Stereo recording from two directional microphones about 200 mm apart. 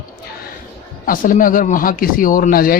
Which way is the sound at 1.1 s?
45° left (ahead or behind).